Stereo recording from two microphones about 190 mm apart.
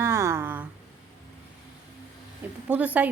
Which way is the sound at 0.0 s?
15° right (ahead or behind).